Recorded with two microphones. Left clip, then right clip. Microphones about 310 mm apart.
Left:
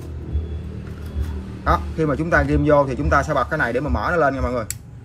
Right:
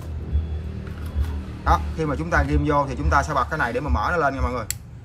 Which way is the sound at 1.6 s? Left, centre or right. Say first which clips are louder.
Left 2 dB; centre.